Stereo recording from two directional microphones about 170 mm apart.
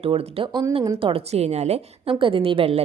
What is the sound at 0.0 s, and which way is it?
A woman's voice, 35° right (ahead or behind).